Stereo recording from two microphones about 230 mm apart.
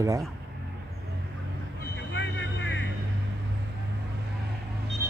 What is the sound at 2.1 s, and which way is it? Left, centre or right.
Vehicle, left.